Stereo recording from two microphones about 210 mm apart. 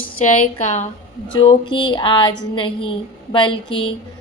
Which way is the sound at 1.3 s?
20° left (ahead or behind).